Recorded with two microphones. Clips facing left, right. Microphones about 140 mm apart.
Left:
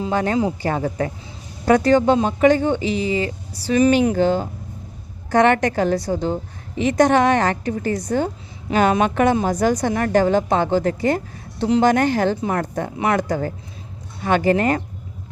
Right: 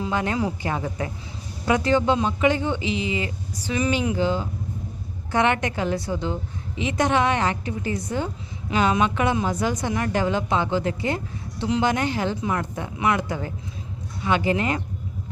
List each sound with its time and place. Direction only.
0.0 s a woman's voice: 35° left (ahead or behind)